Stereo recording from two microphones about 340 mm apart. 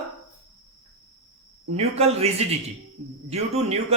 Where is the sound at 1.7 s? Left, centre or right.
Centre.